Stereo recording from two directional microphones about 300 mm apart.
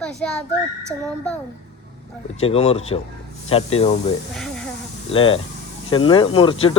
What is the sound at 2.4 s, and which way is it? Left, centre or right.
Speech, centre.